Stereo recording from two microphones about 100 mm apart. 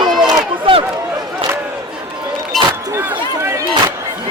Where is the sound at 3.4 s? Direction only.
30° right (ahead or behind).